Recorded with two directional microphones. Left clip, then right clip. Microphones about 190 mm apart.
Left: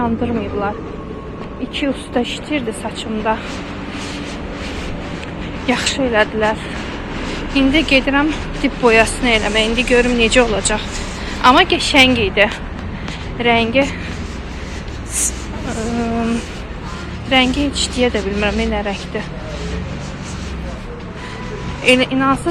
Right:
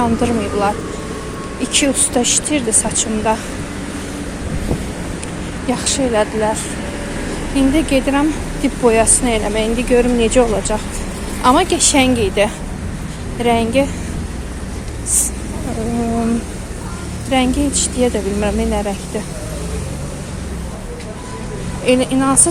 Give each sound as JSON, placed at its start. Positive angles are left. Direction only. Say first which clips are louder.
{"t": 0.0, "sound": "a woman's voice", "louder": "right 3 dB", "side_deg": -20}
{"t": 1.7, "sound": "a woman's voice", "louder": "right 4 dB", "side_deg": -20}
{"t": 5.6, "sound": "speech", "louder": "left 1 dB", "side_deg": -10}
{"t": 7.5, "sound": "speech", "louder": "left 2 dB", "side_deg": -15}
{"t": 17.3, "sound": "speech", "louder": "left 2 dB", "side_deg": -15}
{"t": 21.8, "sound": "speech", "louder": "left 1 dB", "side_deg": -15}